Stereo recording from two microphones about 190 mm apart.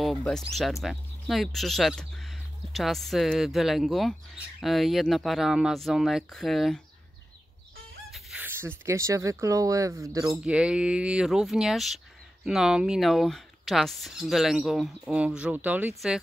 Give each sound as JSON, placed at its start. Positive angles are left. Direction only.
{"t": 0.0, "sound": "speech", "side_deg": 0}
{"t": 8.1, "sound": "speech", "side_deg": -10}
{"t": 10.4, "sound": "speech", "side_deg": -5}